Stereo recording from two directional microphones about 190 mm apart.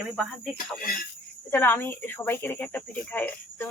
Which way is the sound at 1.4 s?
10° left (ahead or behind).